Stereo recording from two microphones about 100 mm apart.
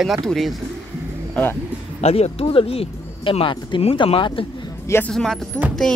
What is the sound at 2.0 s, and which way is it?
Speech, 90° left.